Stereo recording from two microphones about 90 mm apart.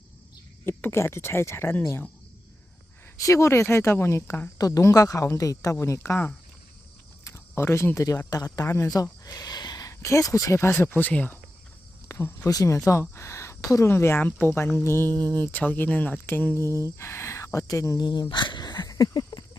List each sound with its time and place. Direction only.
0.6 s speech: 25° left (ahead or behind)
3.2 s speech: 35° left (ahead or behind)
8.6 s speech: 30° left (ahead or behind)
9.0 s a sound: 45° left (ahead or behind)
10.7 s speech: 20° left (ahead or behind)
12.0 s cricket: 25° left (ahead or behind)
12.5 s speech: 40° left (ahead or behind)
15.1 s speech: 50° right (ahead or behind)
15.4 s speech: 20° left (ahead or behind); by 18.0 s 40° left (ahead or behind)
18.0 s speech: 50° left (ahead or behind)